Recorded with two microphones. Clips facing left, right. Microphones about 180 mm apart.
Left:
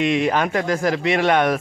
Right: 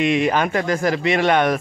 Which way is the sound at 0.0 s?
Centre (ahead or behind).